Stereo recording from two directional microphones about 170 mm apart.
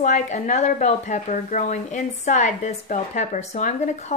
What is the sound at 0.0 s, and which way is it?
Speech, 45° left (ahead or behind).